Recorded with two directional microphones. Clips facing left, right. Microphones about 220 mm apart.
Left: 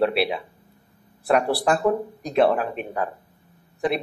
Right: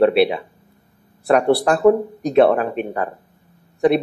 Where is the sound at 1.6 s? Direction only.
Centre (ahead or behind).